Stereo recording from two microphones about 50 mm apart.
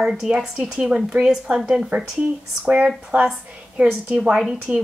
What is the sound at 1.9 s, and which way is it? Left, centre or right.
Speech, right.